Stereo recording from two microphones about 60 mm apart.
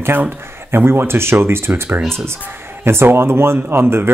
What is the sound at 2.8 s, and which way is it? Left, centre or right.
Speech, right.